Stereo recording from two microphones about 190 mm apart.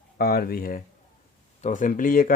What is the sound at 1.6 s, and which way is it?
Speech, 40° left (ahead or behind).